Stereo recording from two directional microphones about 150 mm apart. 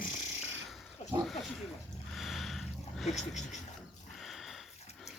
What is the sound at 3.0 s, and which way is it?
Speech, 50° left (ahead or behind).